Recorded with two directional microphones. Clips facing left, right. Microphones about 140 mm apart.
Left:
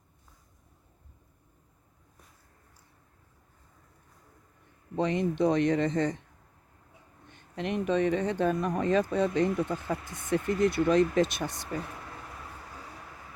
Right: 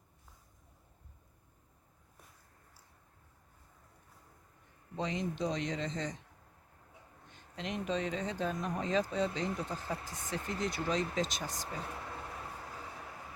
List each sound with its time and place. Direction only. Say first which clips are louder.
4.9 s speech: left 9 dB; 60° left (ahead or behind)
7.3 s speech: left 8 dB; 60° left (ahead or behind)